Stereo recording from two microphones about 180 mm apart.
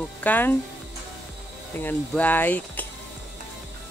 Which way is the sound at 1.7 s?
10° left (ahead or behind).